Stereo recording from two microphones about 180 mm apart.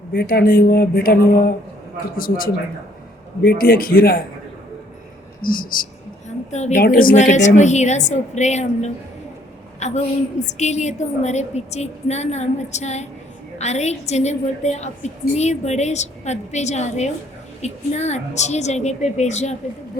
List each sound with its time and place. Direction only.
0.1 s a man's voice: 55° left (ahead or behind)
5.4 s a sound: 55° left (ahead or behind)
6.8 s a woman's voice: 50° left (ahead or behind)